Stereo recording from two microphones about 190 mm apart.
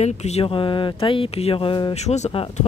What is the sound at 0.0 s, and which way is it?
Speech, 35° left (ahead or behind).